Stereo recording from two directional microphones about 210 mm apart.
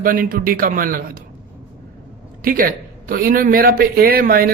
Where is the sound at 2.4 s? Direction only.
45° right (ahead or behind).